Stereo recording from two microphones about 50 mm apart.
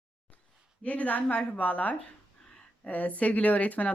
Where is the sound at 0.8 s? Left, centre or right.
Left.